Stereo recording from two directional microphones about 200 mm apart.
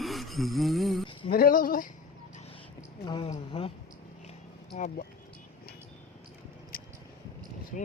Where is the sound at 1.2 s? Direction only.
45° left (ahead or behind).